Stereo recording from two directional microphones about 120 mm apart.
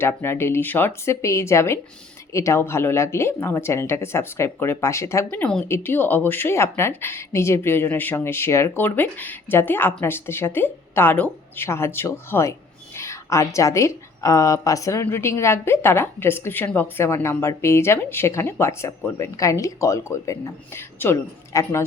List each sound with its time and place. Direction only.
0.0 s speech: 20° left (ahead or behind)
5.3 s speech: 10° left (ahead or behind)
5.6 s a woman's voice: 20° left (ahead or behind)